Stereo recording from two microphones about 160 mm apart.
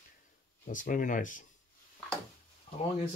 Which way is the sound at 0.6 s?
55° left (ahead or behind).